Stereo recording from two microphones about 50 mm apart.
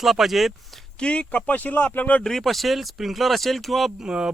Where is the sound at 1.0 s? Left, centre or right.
Left.